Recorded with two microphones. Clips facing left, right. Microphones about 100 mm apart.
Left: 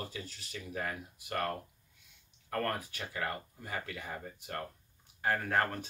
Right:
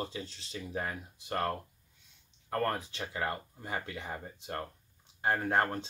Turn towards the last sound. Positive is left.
turn(degrees=-25)  # may be behind; listen again after turning